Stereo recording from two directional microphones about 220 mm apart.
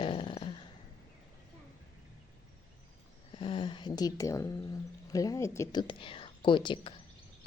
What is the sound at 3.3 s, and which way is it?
A woman's voice, 20° left (ahead or behind).